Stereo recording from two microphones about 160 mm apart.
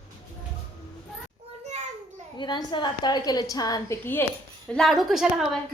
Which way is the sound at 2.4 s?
30° left (ahead or behind).